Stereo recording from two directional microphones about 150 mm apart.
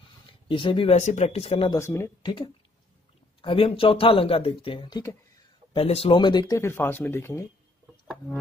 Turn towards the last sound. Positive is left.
turn(degrees=15)  # may be behind; listen again after turning